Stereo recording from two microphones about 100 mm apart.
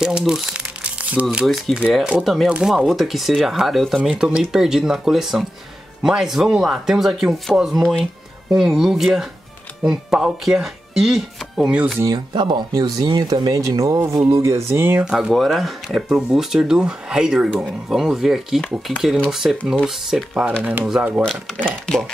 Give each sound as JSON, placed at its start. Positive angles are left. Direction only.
{"t": 0.2, "sound": "crumpling", "side_deg": -5}
{"t": 1.4, "sound": "speech", "side_deg": -5}
{"t": 12.4, "sound": "speech", "side_deg": -50}
{"t": 14.7, "sound": "speech", "side_deg": -20}
{"t": 15.0, "sound": "speech", "side_deg": -5}
{"t": 18.6, "sound": "speech", "side_deg": 10}
{"t": 19.4, "sound": "speech", "side_deg": -5}
{"t": 21.3, "sound": "speech", "side_deg": 10}